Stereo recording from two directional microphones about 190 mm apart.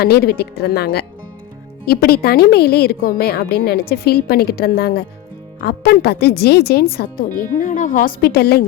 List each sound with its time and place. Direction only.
0.0 s a woman's voice: 55° left (ahead or behind)